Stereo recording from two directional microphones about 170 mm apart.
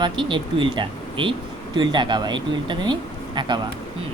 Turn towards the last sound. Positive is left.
turn(degrees=-25)  # may be behind; listen again after turning